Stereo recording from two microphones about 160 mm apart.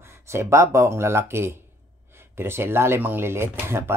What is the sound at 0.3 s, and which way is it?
Speech, 15° right (ahead or behind).